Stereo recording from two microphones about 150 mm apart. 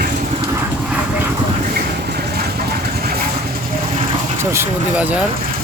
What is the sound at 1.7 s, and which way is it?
Vehicle, 90° right.